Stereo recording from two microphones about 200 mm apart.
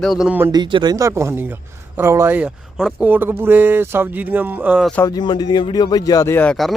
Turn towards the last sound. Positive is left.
turn(degrees=5)  # may be behind; listen again after turning